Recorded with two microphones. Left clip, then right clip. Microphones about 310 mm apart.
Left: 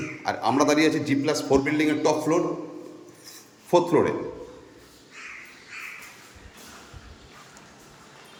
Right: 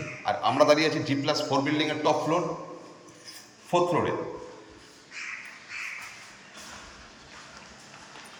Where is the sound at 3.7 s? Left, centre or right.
Centre.